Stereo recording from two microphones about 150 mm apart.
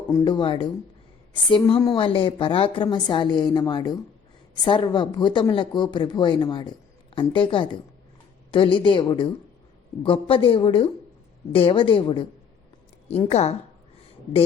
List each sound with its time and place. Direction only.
0.3 s speech: 35° left (ahead or behind)
13.3 s a woman's voice: 45° left (ahead or behind)